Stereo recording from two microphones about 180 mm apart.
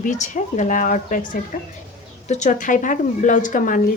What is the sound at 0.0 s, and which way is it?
A woman's voice, 40° left (ahead or behind).